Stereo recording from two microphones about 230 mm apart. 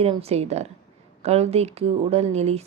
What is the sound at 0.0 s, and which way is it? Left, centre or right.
Speech, right.